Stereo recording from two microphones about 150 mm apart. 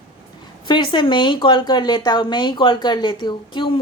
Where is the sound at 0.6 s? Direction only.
30° left (ahead or behind).